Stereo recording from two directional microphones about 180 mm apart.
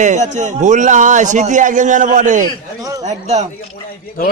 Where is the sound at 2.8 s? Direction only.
20° right (ahead or behind).